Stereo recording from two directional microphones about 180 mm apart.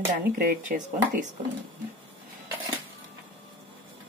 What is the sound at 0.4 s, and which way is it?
Speech, 50° right (ahead or behind).